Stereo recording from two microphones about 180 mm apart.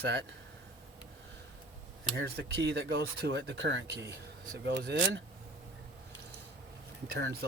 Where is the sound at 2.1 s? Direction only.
70° right (ahead or behind); by 4.0 s 85° right.